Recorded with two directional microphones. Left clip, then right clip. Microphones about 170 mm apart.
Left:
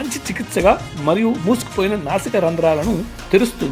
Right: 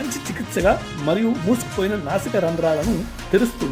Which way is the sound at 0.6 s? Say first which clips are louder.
Left 4 dB; 25° left (ahead or behind).